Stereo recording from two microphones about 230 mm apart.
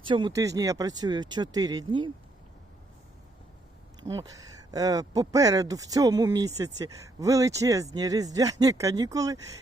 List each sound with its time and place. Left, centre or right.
0.1 s speech: centre
4.0 s speech: centre